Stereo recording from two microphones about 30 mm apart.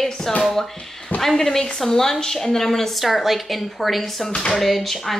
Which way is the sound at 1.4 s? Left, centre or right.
Centre.